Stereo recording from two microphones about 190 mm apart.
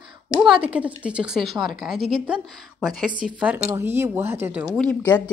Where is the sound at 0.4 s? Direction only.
5° right (ahead or behind).